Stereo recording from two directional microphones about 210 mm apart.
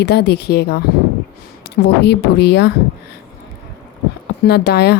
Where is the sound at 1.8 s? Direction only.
55° left (ahead or behind).